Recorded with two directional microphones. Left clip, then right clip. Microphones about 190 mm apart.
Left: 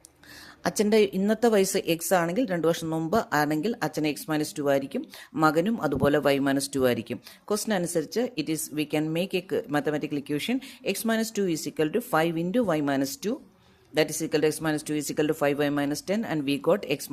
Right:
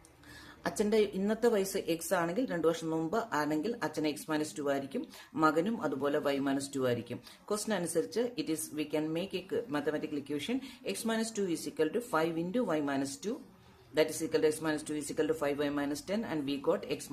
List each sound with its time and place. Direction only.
0.6 s a woman's voice: 40° left (ahead or behind)